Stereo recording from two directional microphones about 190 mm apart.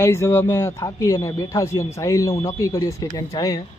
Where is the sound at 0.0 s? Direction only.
15° left (ahead or behind).